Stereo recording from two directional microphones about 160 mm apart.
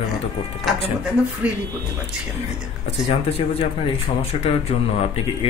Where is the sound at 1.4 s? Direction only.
10° right (ahead or behind).